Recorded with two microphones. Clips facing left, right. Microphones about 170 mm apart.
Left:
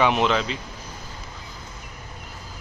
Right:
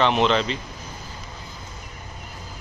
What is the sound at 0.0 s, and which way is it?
Speech, 5° left (ahead or behind).